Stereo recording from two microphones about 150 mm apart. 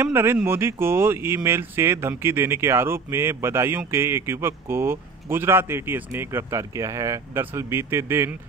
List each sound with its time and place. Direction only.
0.0 s speech: 15° right (ahead or behind)